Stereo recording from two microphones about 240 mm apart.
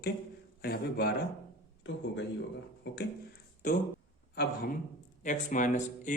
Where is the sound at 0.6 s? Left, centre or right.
Left.